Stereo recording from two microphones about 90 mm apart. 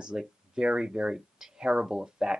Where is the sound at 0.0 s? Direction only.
10° right (ahead or behind).